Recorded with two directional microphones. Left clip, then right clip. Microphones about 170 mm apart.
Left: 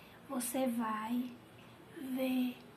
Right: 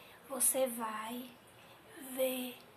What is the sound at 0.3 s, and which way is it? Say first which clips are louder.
Speech: right 2 dB; 15° right (ahead or behind).